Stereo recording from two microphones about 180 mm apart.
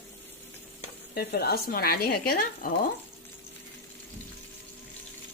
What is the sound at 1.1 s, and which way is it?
Speech, 60° left (ahead or behind).